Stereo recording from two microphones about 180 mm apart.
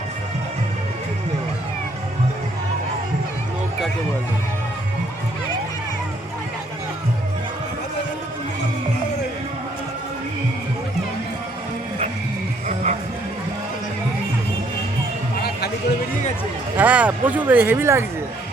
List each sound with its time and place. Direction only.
12.6 s music: 45° right (ahead or behind)
16.7 s speech: 10° right (ahead or behind)